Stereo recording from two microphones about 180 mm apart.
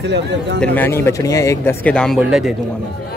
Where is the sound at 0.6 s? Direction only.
10° left (ahead or behind).